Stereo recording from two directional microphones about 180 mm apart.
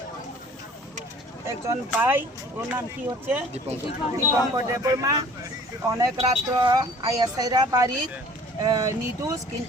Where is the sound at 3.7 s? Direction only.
35° right (ahead or behind).